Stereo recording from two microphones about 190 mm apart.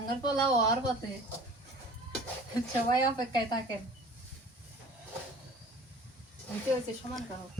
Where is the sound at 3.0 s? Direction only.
20° left (ahead or behind).